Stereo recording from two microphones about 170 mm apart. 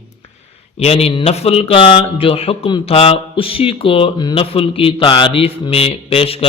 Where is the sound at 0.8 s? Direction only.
35° left (ahead or behind).